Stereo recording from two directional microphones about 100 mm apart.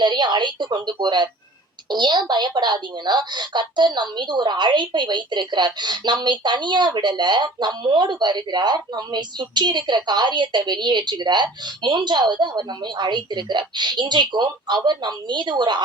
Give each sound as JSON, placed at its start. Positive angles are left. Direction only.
{"t": 0.0, "sound": "a woman's voice", "side_deg": -50}